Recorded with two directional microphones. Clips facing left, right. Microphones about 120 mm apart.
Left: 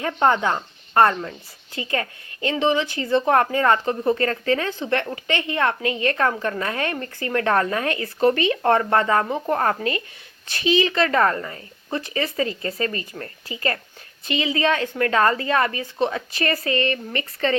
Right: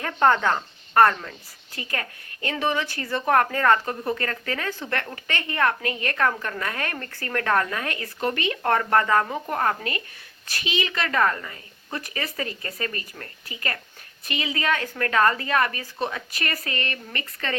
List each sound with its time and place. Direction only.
0.0 s speech: 20° left (ahead or behind)